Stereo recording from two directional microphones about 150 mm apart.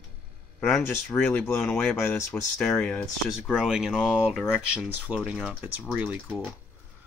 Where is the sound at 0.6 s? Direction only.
5° left (ahead or behind).